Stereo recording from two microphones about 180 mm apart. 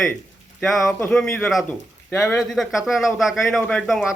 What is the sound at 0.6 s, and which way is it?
A man's voice, centre (ahead or behind).